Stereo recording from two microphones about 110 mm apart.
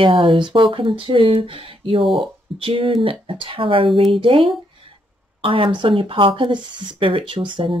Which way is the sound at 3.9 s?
Centre (ahead or behind).